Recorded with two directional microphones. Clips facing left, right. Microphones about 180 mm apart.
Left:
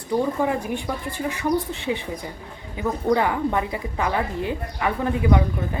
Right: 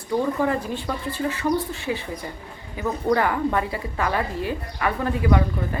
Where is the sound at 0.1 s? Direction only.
15° left (ahead or behind).